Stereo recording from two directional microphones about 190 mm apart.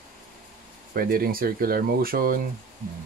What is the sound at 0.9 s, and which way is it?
Speech, 50° right (ahead or behind).